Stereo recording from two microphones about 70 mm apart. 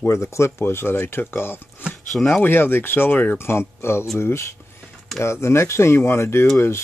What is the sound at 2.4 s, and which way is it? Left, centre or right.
Speech, left.